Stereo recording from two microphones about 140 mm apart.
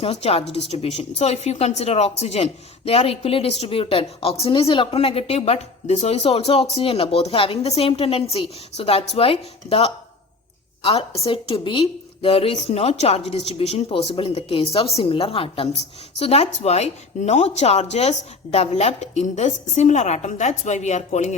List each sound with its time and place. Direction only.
0.0 s a woman's voice: 45° left (ahead or behind)